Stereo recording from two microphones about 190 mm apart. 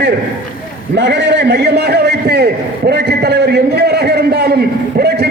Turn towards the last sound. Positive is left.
turn(degrees=-60)  # may be behind; listen again after turning